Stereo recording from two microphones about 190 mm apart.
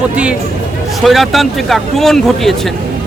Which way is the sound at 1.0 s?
Centre (ahead or behind).